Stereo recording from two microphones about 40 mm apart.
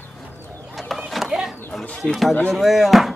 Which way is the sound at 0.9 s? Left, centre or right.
Centre.